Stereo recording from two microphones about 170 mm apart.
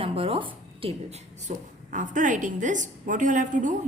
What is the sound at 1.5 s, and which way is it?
A woman's voice, 45° right (ahead or behind).